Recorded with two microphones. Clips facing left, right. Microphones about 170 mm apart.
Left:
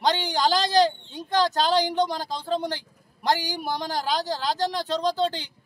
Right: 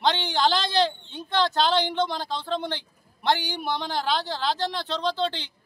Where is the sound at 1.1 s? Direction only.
40° left (ahead or behind).